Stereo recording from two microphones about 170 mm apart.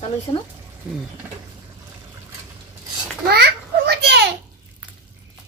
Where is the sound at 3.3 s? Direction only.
70° right (ahead or behind).